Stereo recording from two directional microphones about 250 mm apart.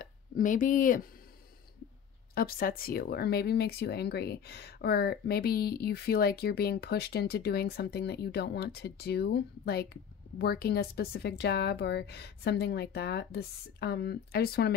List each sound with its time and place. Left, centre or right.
0.0 s speech: left
2.3 s speech: left